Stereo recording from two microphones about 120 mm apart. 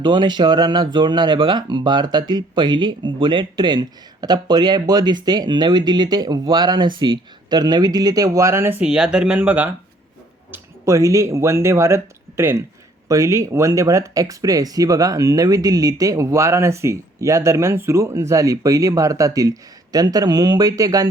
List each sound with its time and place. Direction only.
0.0 s speech: 35° right (ahead or behind); by 9.6 s 10° right (ahead or behind)
10.5 s speech: 25° right (ahead or behind)